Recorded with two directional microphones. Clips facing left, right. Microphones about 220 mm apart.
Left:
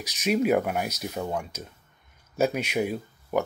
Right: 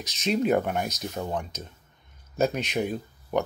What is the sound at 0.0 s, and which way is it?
Speech, 10° left (ahead or behind).